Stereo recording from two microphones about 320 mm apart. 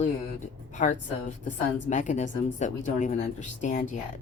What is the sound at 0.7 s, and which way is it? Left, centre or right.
A woman's voice, left.